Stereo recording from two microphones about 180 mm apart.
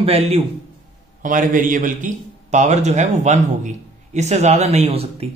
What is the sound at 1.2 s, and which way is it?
A man's voice, 45° right (ahead or behind).